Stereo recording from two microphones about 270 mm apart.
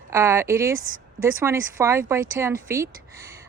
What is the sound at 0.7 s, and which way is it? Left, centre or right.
Speech, right.